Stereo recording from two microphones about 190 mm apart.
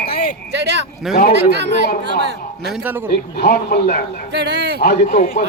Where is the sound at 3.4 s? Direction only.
50° left (ahead or behind).